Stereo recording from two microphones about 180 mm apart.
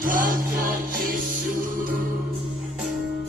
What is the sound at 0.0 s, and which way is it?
Music, 50° right (ahead or behind).